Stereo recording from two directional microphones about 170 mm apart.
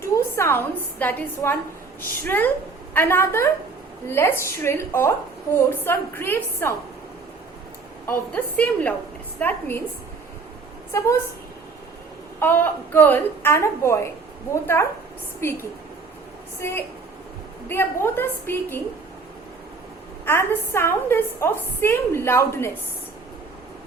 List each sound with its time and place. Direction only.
0.0 s a woman's voice: 15° left (ahead or behind)
8.0 s a woman's voice: 10° left (ahead or behind)
12.4 s a woman's voice: 10° left (ahead or behind)
20.2 s a woman's voice: 15° left (ahead or behind)